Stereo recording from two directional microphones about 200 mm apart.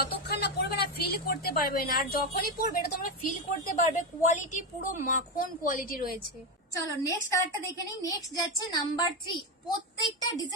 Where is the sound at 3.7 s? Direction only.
40° left (ahead or behind).